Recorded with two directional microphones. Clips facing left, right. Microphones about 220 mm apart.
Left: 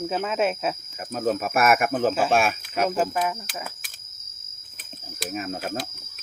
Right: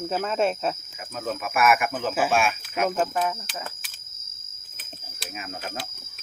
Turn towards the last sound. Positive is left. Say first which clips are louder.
# left 6 dB
turn(degrees=40)  # may be behind; listen again after turning